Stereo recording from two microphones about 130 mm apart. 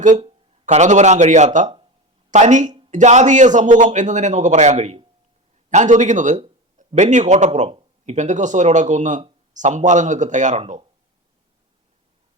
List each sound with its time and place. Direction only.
0.6 s a man's voice: 70° right (ahead or behind)
10.6 s speech: 50° right (ahead or behind)